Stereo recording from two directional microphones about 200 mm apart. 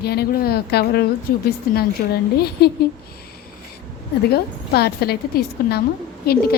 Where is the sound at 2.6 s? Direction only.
55° left (ahead or behind).